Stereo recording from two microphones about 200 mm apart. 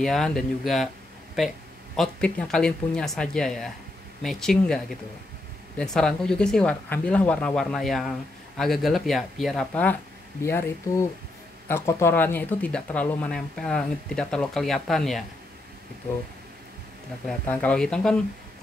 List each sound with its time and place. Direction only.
0.0 s speech: centre (ahead or behind)
2.0 s speech: 5° left (ahead or behind)
17.3 s speech: 5° left (ahead or behind)